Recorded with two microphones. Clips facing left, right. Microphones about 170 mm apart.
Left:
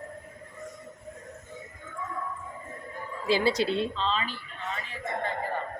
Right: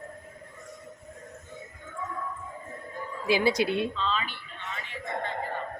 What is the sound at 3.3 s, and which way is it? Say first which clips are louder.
Speech: even; 15° right (ahead or behind).